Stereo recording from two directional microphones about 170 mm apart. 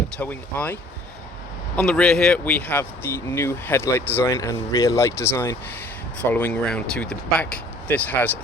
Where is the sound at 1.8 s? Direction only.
5° left (ahead or behind).